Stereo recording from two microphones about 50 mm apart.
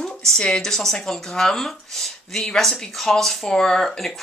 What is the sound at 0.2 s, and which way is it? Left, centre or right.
Speech, centre.